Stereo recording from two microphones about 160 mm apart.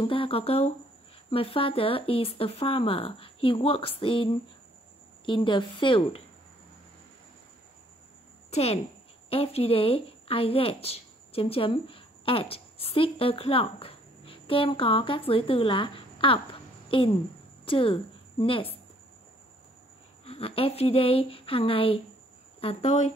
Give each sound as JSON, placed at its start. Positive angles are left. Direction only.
{"t": 0.0, "sound": "speech", "side_deg": 35}
{"t": 8.5, "sound": "a woman's voice", "side_deg": 40}
{"t": 20.2, "sound": "speech", "side_deg": 35}